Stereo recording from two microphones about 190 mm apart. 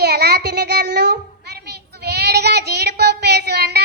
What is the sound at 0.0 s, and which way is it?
Child singing, 60° right (ahead or behind).